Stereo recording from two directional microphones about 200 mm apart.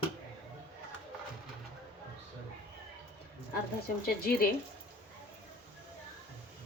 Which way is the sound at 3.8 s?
50° left (ahead or behind).